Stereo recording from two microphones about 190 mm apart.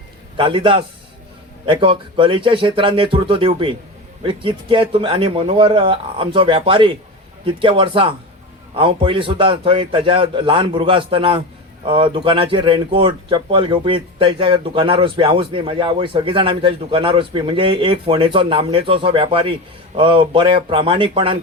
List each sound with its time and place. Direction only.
0.3 s speech: 25° right (ahead or behind)